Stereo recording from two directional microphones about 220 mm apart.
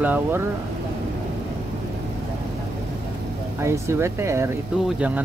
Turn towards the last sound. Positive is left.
turn(degrees=-5)  # may be behind; listen again after turning